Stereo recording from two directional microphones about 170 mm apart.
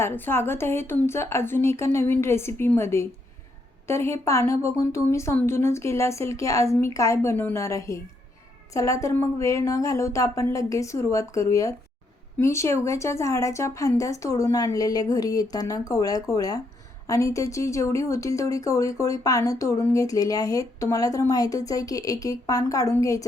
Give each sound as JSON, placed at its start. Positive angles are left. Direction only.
{"t": 0.0, "sound": "a woman's voice", "side_deg": 15}